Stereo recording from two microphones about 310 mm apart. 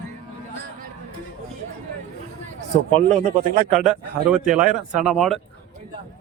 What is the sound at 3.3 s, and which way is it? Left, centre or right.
Speech, right.